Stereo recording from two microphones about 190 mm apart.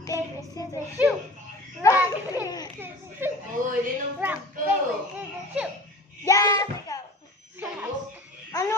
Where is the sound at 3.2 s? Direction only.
10° right (ahead or behind).